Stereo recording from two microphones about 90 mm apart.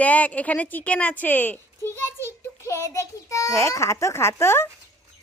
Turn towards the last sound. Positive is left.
turn(degrees=30)  # may be behind; listen again after turning